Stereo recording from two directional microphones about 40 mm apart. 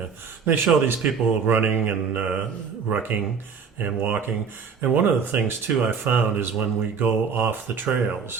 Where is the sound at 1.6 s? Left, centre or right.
Right.